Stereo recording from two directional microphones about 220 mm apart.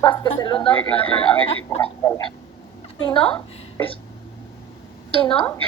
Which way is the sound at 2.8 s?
25° left (ahead or behind).